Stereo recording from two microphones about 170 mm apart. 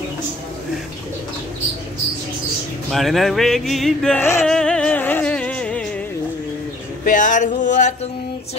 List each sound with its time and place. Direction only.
2.9 s speech: centre (ahead or behind)
4.5 s music: 5° left (ahead or behind)
7.1 s music: 50° left (ahead or behind)